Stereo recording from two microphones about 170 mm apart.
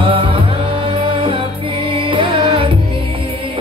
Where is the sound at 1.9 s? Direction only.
30° right (ahead or behind).